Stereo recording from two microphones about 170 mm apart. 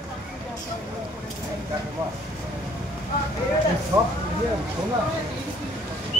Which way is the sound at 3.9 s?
20° right (ahead or behind).